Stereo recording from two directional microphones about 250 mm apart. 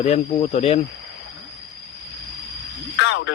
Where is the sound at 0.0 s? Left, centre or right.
Left.